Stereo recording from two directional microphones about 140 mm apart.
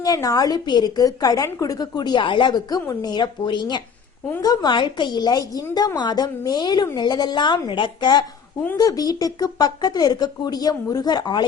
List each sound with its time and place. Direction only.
0.0 s a woman's voice: 25° left (ahead or behind)
8.6 s a woman's voice: 20° left (ahead or behind)